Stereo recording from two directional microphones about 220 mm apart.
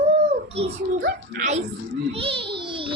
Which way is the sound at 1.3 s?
40° right (ahead or behind).